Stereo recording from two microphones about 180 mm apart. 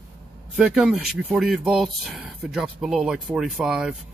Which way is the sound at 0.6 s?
5° right (ahead or behind).